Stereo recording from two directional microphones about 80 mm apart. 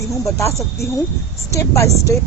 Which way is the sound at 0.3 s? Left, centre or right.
Left.